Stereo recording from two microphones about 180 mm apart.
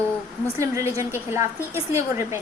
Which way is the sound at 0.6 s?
15° right (ahead or behind).